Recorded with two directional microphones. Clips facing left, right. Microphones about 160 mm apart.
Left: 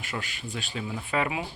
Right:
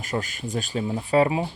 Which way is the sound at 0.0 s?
40° right (ahead or behind).